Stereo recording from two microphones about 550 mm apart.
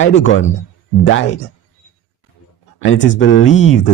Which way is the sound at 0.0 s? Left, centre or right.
Centre.